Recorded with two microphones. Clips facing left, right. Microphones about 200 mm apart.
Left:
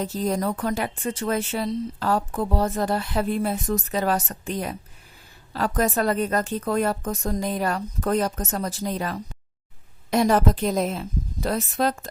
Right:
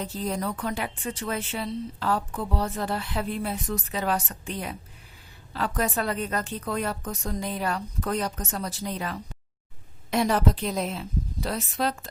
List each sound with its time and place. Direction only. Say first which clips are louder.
0.0 s speech: left 5 dB; 45° left (ahead or behind)